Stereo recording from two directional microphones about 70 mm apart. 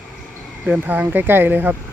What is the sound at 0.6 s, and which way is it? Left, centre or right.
Speech, right.